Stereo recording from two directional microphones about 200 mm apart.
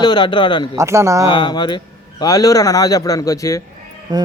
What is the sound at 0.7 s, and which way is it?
Speech, 15° right (ahead or behind).